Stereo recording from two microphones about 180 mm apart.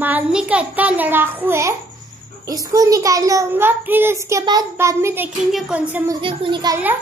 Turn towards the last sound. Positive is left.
turn(degrees=-25)  # may be behind; listen again after turning